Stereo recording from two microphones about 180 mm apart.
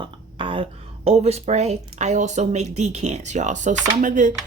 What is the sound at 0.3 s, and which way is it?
A woman's voice, 30° right (ahead or behind).